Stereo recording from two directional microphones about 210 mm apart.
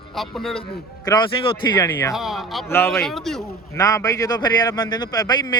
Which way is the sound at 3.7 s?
15° left (ahead or behind).